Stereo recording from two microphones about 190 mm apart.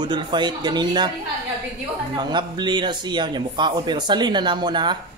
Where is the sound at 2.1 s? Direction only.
25° right (ahead or behind).